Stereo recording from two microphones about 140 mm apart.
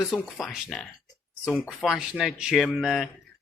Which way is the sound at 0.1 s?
Centre (ahead or behind).